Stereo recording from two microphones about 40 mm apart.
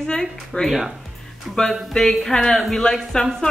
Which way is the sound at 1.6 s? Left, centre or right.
Centre.